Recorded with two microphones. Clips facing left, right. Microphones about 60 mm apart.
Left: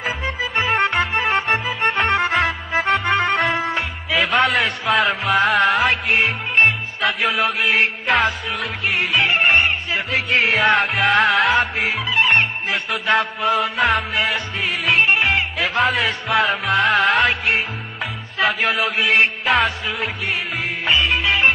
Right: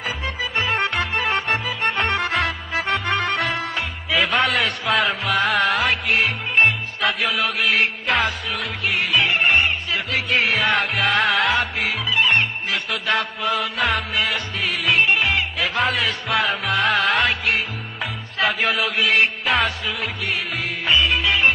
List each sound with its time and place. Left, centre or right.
0.4 s music: centre